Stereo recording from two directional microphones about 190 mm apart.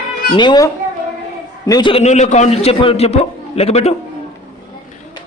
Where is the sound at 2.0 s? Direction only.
35° left (ahead or behind).